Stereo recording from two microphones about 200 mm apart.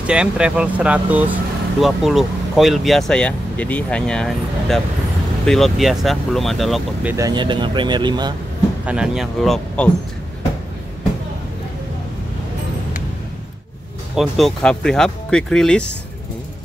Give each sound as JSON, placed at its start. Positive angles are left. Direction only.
{"t": 0.0, "sound": "speech", "side_deg": -5}
{"t": 7.2, "sound": "speech", "side_deg": -20}
{"t": 8.8, "sound": "speech", "side_deg": -5}
{"t": 14.1, "sound": "speech", "side_deg": 0}